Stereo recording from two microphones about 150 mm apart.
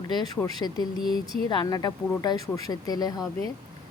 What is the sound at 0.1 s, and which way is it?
Speech, 30° left (ahead or behind).